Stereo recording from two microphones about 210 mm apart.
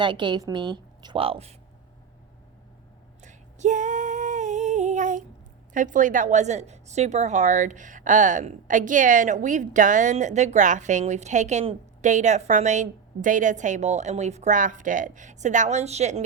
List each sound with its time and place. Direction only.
0.0 s a woman's voice: 20° right (ahead or behind)
3.2 s female singing: 35° right (ahead or behind)
5.7 s a woman's voice: 40° right (ahead or behind)